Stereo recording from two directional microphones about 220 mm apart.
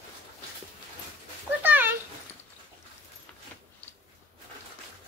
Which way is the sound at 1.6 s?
10° right (ahead or behind).